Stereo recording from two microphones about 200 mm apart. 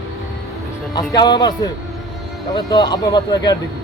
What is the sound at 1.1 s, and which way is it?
Speech, 20° left (ahead or behind).